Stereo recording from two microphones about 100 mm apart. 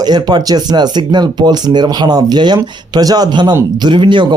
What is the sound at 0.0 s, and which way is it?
A man's voice, 45° right (ahead or behind).